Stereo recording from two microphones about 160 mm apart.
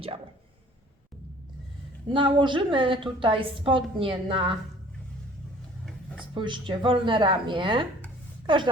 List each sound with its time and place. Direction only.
2.0 s a woman's voice: 30° right (ahead or behind)
6.3 s a woman's voice: 30° right (ahead or behind)